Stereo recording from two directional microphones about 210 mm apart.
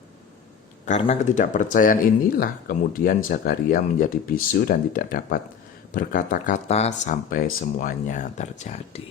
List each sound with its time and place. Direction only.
0.9 s speech: 30° left (ahead or behind)